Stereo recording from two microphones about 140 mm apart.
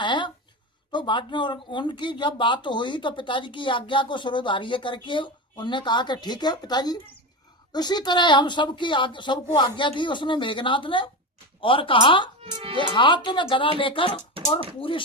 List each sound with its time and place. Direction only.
0.0 s a sound: 35° left (ahead or behind)
0.9 s speech: 35° left (ahead or behind)
12.5 s speech: 30° right (ahead or behind)
12.7 s speech: 35° left (ahead or behind)
14.4 s a sound: 40° right (ahead or behind)
14.8 s speech: 40° left (ahead or behind)